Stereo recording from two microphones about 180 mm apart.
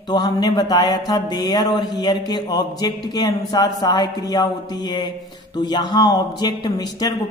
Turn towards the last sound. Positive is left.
turn(degrees=20)  # may be behind; listen again after turning